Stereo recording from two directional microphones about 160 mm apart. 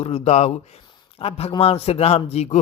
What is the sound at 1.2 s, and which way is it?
A man's voice, 40° left (ahead or behind).